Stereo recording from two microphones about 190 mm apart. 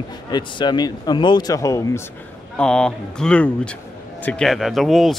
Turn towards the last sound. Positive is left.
turn(degrees=0)  # may be behind; listen again after turning